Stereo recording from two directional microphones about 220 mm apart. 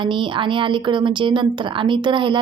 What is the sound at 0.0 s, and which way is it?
A woman's voice, 20° right (ahead or behind).